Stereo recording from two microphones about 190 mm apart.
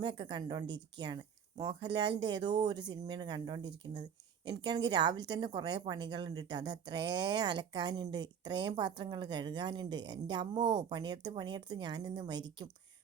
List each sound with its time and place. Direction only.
0.0 s speech: 25° right (ahead or behind)